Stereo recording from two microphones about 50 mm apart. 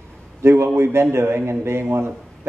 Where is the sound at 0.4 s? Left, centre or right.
Right.